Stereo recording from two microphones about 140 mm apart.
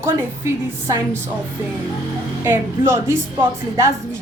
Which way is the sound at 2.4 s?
15° right (ahead or behind).